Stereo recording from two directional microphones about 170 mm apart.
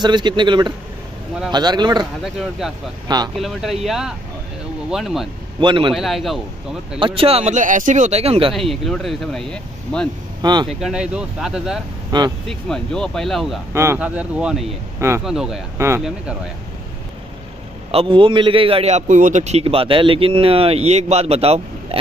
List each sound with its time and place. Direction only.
0.0 s a man's voice: 25° right (ahead or behind)
2.2 s speech: centre (ahead or behind)
5.6 s a man's voice: 30° right (ahead or behind)
5.9 s speech: centre (ahead or behind)
7.0 s a man's voice: 30° right (ahead or behind)
8.5 s speech: centre (ahead or behind)
10.4 s a man's voice: 25° right (ahead or behind)
10.7 s speech: 5° right (ahead or behind)
12.1 s a man's voice: 25° right (ahead or behind)
12.4 s speech: 5° left (ahead or behind)
13.7 s speech: 10° right (ahead or behind)
15.2 s speech: centre (ahead or behind)
17.9 s a man's voice: 30° right (ahead or behind)